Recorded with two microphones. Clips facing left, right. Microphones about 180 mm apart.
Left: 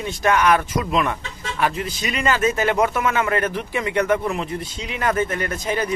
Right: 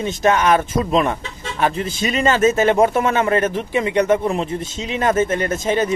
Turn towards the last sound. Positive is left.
turn(degrees=-25)  # may be behind; listen again after turning